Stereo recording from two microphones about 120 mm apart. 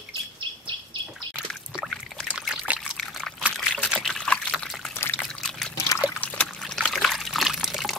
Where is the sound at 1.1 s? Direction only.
Centre (ahead or behind).